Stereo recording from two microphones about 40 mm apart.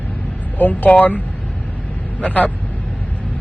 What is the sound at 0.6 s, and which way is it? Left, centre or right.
Speech, left.